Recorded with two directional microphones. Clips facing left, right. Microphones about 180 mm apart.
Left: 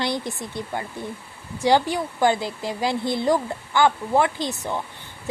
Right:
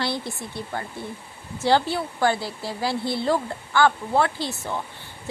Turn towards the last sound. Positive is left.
turn(degrees=15)  # may be behind; listen again after turning